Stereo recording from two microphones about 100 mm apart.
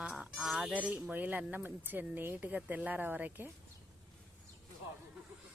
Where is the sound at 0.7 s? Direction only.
15° right (ahead or behind).